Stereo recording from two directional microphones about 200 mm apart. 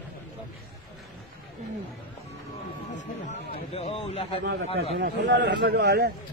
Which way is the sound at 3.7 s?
30° left (ahead or behind).